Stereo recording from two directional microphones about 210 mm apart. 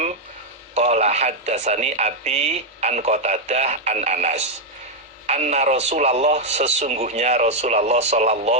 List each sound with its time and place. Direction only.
0.7 s speech: 30° right (ahead or behind)